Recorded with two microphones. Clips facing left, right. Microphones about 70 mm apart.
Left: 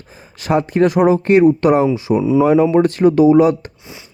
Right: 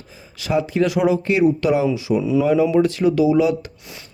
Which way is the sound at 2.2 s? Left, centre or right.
Left.